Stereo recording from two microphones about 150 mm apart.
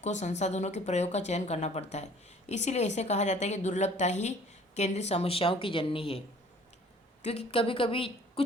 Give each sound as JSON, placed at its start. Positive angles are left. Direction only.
{"t": 0.0, "sound": "a woman's voice", "side_deg": 50}
{"t": 7.3, "sound": "a woman's voice", "side_deg": 40}